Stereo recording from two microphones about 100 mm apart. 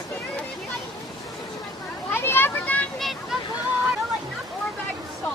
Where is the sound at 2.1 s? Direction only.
20° left (ahead or behind).